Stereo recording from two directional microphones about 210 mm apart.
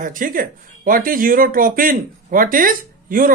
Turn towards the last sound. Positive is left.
turn(degrees=-40)  # may be behind; listen again after turning